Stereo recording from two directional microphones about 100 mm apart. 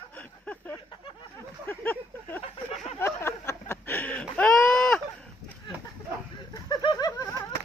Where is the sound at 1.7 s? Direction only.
20° left (ahead or behind); by 5.0 s 5° left (ahead or behind).